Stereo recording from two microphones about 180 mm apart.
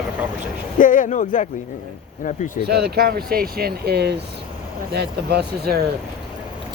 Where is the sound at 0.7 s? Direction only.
45° left (ahead or behind).